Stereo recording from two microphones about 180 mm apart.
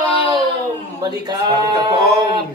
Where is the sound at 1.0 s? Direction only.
25° right (ahead or behind).